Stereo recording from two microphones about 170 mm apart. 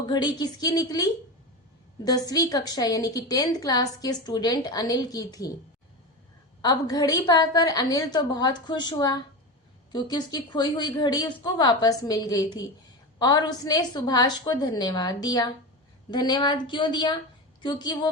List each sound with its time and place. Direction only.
0.0 s a woman's voice: 25° left (ahead or behind)
6.6 s a woman's voice: 25° left (ahead or behind)